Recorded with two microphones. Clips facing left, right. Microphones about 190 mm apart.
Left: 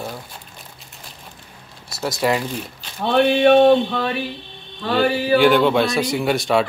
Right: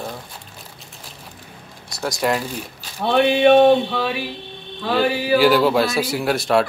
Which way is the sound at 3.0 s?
5° right (ahead or behind).